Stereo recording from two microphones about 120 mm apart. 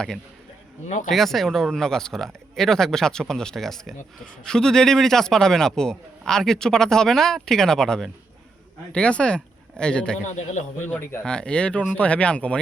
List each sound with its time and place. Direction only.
0.9 s speech: 90° left
1.1 s a man's voice: centre (ahead or behind)
10.2 s a man's voice: 85° left
10.8 s speech: 15° left (ahead or behind)